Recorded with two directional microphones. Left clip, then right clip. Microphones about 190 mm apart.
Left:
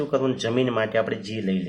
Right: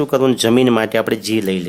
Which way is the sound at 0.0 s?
60° right (ahead or behind).